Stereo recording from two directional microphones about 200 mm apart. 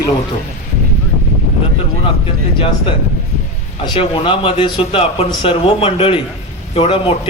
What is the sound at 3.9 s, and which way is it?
A man's voice, 25° left (ahead or behind).